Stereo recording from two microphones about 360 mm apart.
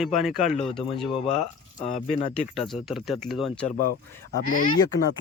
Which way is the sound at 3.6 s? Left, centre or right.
Left.